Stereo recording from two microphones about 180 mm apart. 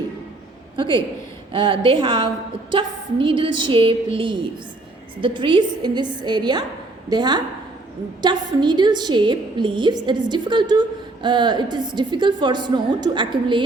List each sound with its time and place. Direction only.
0.8 s a woman's voice: 25° right (ahead or behind)